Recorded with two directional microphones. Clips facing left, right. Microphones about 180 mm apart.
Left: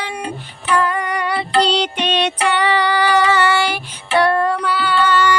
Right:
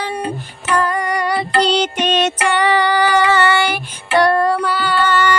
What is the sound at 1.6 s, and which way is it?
Music, 45° right (ahead or behind).